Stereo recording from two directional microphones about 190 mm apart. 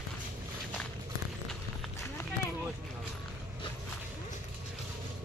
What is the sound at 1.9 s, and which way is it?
Clip-clop, 15° left (ahead or behind).